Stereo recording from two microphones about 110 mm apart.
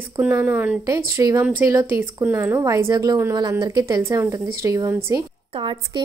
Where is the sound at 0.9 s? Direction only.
35° right (ahead or behind).